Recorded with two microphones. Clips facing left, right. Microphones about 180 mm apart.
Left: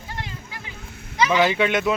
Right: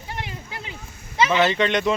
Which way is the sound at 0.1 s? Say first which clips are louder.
Right 2 dB; 20° right (ahead or behind).